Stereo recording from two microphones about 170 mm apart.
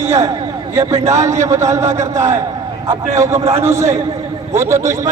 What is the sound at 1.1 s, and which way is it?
A man's voice, 15° right (ahead or behind).